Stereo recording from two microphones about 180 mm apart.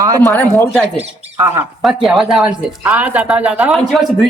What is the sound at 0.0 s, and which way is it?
Speech, 20° right (ahead or behind).